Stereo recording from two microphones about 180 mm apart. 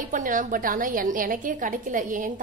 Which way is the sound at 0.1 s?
45° right (ahead or behind).